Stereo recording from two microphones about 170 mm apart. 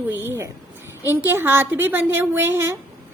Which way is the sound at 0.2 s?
15° right (ahead or behind).